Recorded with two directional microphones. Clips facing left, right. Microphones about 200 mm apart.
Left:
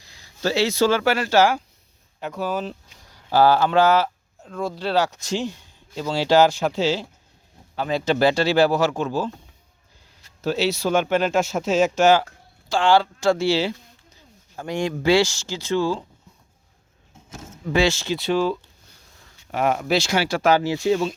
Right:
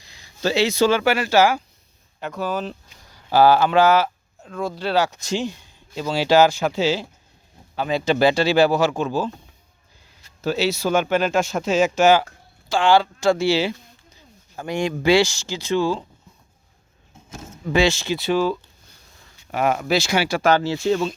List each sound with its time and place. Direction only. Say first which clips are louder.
0.0 s speech: right 1 dB; 15° right (ahead or behind)
2.2 s speech: even; 5° left (ahead or behind)
3.2 s speech: right 2 dB; 10° right (ahead or behind)
10.4 s speech: right 1 dB; centre (ahead or behind); by 16.0 s 15° right (ahead or behind)
17.3 s speech: right 1 dB; 20° right (ahead or behind)
20.6 s speech: even; 15° left (ahead or behind)